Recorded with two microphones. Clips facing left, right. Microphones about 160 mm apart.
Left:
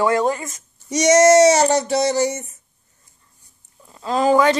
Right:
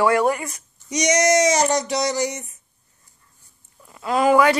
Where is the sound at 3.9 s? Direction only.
30° left (ahead or behind).